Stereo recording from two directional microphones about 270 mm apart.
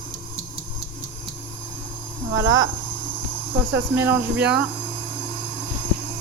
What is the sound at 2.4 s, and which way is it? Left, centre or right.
Speech, right.